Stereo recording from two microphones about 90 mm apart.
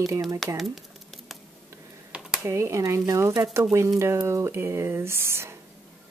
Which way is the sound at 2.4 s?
35° right (ahead or behind).